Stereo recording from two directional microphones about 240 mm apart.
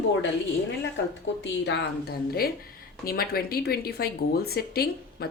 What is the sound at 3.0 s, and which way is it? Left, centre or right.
A woman's voice, left.